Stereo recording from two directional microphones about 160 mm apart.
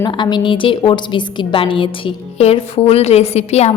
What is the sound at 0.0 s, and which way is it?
A woman's voice, 30° left (ahead or behind).